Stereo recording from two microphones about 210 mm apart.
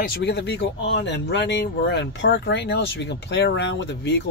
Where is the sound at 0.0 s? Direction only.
50° left (ahead or behind).